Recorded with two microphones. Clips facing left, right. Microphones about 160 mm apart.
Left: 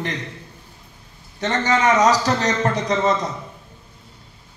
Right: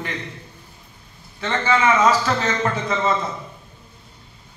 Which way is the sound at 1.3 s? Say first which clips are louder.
Left 1 dB; 40° left (ahead or behind).